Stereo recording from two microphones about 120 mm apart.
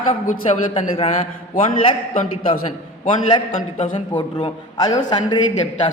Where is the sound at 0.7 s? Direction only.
50° left (ahead or behind).